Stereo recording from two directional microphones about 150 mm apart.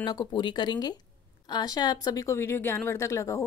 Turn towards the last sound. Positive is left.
turn(degrees=20)  # may be behind; listen again after turning